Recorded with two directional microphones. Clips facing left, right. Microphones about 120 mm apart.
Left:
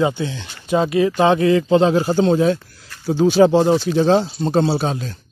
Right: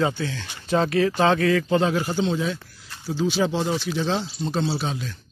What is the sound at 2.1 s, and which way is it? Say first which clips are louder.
Speech: left 9 dB; 45° left (ahead or behind).